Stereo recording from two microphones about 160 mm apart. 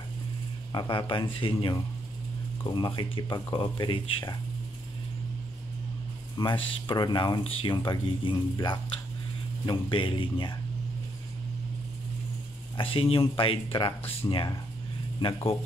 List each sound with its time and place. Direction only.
0.7 s speech: 30° left (ahead or behind)
6.3 s speech: 30° left (ahead or behind)
12.7 s speech: 35° left (ahead or behind)